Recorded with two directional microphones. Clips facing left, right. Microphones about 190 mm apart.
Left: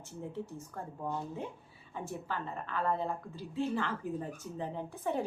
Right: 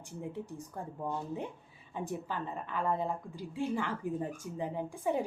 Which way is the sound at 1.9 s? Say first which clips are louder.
Right 2 dB; 15° right (ahead or behind).